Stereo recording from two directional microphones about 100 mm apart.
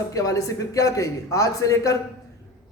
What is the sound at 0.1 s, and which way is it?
A man's voice, 35° left (ahead or behind).